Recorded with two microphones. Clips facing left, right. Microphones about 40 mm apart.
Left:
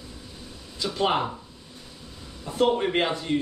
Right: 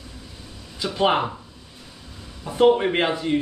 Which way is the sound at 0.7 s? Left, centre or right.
Centre.